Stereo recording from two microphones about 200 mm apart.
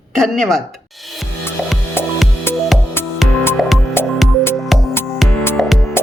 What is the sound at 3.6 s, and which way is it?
Music, centre (ahead or behind).